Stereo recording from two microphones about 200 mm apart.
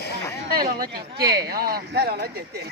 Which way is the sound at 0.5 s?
50° right (ahead or behind).